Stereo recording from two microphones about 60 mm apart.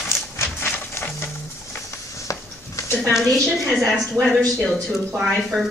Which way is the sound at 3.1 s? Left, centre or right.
Centre.